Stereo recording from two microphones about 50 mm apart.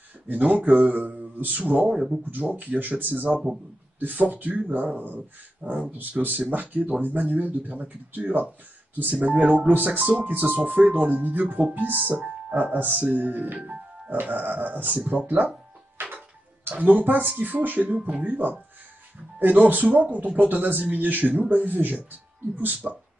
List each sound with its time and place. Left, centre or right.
0.3 s speech: right
1.9 s speech: centre
2.5 s speech: right
16.0 s tick-tock: right
16.6 s speech: right
22.8 s speech: centre